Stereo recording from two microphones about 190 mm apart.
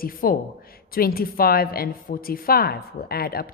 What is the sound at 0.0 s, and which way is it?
A woman's voice, 50° left (ahead or behind).